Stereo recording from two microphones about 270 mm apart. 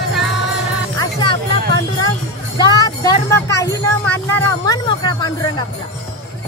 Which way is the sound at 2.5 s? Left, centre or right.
Centre.